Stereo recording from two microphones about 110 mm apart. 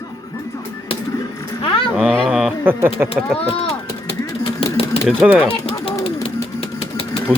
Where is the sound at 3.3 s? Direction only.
65° left (ahead or behind).